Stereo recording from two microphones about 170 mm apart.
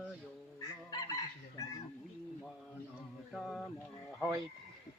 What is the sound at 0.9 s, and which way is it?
Chicken, 20° left (ahead or behind).